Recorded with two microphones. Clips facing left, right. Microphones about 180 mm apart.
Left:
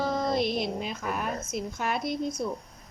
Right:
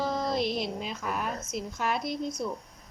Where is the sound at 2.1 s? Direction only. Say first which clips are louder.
Left 2 dB; 50° left (ahead or behind).